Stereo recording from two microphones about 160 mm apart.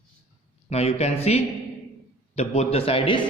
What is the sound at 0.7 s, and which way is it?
A man's voice, 40° left (ahead or behind).